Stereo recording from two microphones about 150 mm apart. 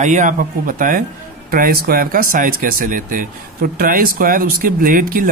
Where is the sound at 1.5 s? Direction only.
80° right.